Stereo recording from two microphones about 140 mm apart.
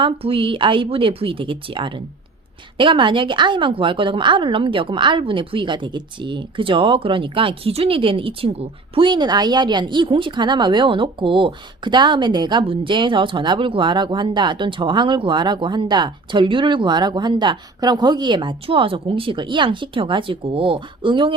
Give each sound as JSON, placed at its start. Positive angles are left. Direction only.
{"t": 0.0, "sound": "speech", "side_deg": -40}